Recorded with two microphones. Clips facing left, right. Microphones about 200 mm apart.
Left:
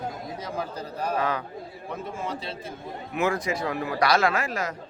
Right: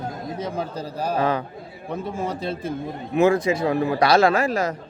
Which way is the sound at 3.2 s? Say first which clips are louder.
Right 8 dB; 25° right (ahead or behind).